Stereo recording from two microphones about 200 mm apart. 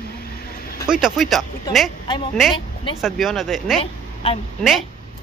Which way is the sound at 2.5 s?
25° left (ahead or behind).